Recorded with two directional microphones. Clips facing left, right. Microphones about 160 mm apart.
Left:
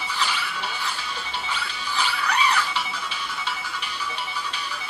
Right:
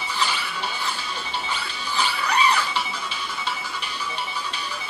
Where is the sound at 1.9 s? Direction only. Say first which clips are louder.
Right 2 dB; 35° right (ahead or behind).